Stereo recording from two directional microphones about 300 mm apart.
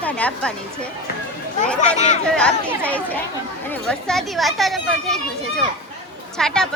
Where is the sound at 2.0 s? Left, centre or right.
Left.